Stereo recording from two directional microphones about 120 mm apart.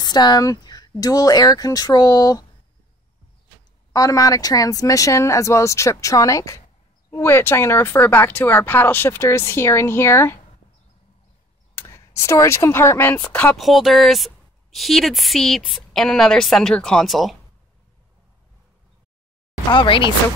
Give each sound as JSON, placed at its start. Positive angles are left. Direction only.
{"t": 0.0, "sound": "speech", "side_deg": 35}
{"t": 3.9, "sound": "speech", "side_deg": 30}
{"t": 11.7, "sound": "a sound", "side_deg": 20}
{"t": 12.2, "sound": "speech", "side_deg": 25}
{"t": 13.6, "sound": "a woman's voice", "side_deg": 0}
{"t": 19.7, "sound": "speech", "side_deg": 40}